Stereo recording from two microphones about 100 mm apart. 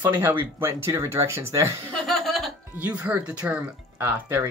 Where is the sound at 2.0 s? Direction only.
Centre (ahead or behind).